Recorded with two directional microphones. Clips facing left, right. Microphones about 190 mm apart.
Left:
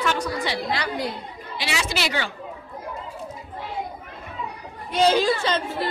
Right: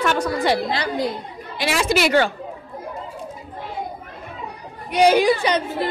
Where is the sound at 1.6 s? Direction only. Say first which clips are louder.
Right 8 dB; 50° right (ahead or behind).